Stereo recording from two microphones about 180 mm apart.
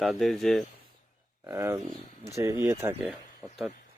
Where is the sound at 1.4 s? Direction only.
15° right (ahead or behind).